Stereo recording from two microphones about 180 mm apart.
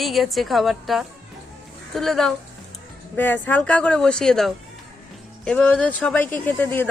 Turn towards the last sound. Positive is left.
turn(degrees=10)  # may be behind; listen again after turning